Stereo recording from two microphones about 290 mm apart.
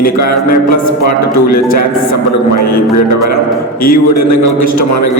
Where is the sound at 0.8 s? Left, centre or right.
Left.